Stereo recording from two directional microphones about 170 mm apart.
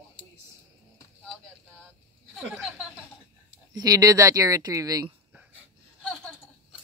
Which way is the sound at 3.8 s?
20° right (ahead or behind).